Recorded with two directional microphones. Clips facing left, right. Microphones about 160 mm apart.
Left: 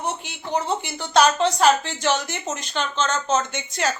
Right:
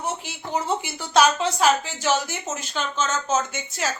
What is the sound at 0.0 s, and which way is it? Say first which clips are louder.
A woman's voice: left 1 dB; 5° right (ahead or behind).